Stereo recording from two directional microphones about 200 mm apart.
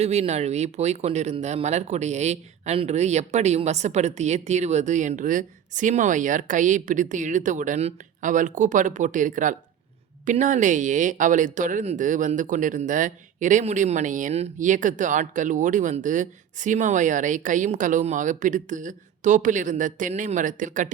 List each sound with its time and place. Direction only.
0.0 s speech: 35° right (ahead or behind)